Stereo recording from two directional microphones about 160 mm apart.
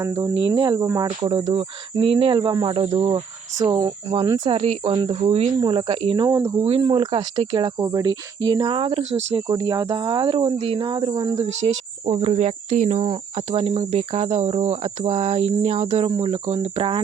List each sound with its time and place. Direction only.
0.0 s speech: 20° right (ahead or behind)
3.6 s cricket: 25° right (ahead or behind)
6.2 s speech: 20° right (ahead or behind)
6.6 s speech: 35° right (ahead or behind)
12.0 s cricket: 40° right (ahead or behind)